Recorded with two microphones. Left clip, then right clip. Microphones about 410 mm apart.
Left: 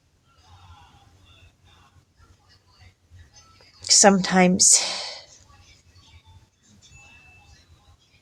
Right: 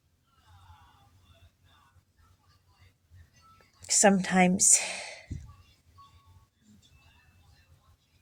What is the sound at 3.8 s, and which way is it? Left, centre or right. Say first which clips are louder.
Speech: left 7 dB; right.